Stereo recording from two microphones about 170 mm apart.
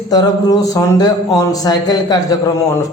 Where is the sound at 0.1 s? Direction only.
20° left (ahead or behind).